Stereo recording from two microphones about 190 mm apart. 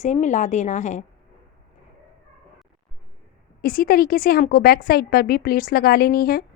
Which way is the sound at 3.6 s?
50° left (ahead or behind).